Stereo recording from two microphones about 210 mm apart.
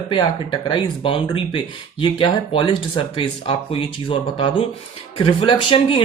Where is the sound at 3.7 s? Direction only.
25° left (ahead or behind).